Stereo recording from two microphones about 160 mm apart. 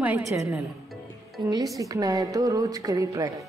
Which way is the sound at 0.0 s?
15° right (ahead or behind).